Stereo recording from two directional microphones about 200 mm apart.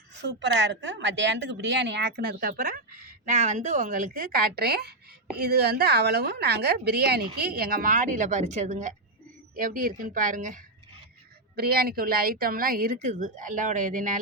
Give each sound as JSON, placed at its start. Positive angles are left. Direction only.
{"t": 0.2, "sound": "a woman's voice", "side_deg": -60}